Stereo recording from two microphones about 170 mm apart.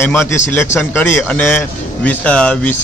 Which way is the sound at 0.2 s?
15° left (ahead or behind).